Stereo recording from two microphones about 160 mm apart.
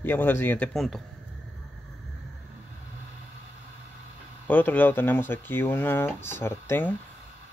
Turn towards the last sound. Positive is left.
turn(degrees=15)  # may be behind; listen again after turning